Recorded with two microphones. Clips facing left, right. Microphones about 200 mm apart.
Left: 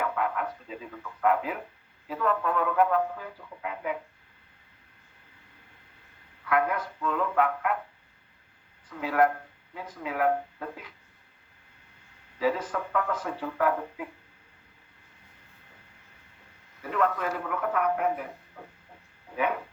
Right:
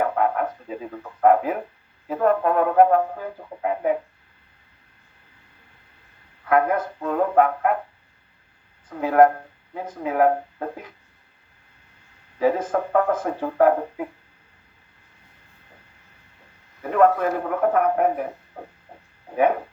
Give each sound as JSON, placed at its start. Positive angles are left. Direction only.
{"t": 0.0, "sound": "music", "side_deg": -45}
{"t": 2.0, "sound": "speech", "side_deg": -50}
{"t": 6.4, "sound": "speech", "side_deg": -45}
{"t": 8.9, "sound": "speech", "side_deg": -45}
{"t": 12.4, "sound": "speech", "side_deg": -50}
{"t": 16.8, "sound": "speech", "side_deg": -50}